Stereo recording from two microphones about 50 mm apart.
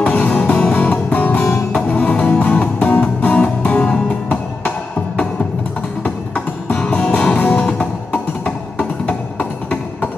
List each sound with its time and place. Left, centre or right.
0.0 s music: left